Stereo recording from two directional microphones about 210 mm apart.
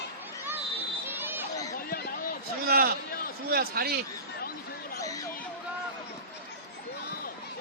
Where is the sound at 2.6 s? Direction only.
45° right (ahead or behind).